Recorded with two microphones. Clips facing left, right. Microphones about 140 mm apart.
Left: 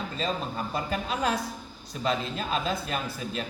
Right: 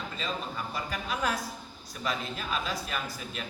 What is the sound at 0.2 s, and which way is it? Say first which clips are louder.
A man's voice: left 5 dB; 35° left (ahead or behind).